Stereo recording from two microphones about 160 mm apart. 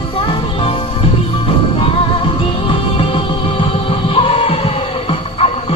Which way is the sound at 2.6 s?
35° left (ahead or behind).